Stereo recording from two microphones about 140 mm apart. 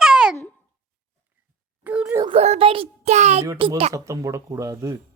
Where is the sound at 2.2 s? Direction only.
45° right (ahead or behind).